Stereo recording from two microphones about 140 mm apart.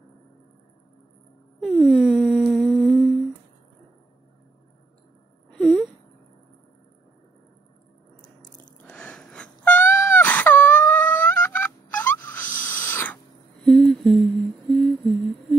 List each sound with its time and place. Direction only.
1.6 s wail: 10° left (ahead or behind)
1.9 s humming: 5° right (ahead or behind)
8.2 s drip: 65° left (ahead or behind)
8.8 s wail: 5° left (ahead or behind)
12.4 s owl: 75° left (ahead or behind)
12.8 s owl: 15° left (ahead or behind)
13.7 s humming: centre (ahead or behind)